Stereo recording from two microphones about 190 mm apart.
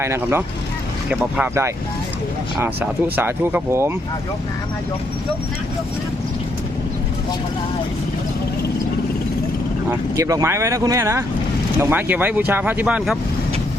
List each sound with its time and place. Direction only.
0.0 s speech: 15° right (ahead or behind)
9.9 s speech: 15° right (ahead or behind)